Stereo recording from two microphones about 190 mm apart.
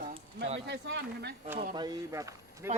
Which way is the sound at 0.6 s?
60° right (ahead or behind).